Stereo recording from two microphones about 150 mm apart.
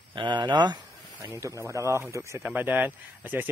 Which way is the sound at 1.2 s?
15° right (ahead or behind).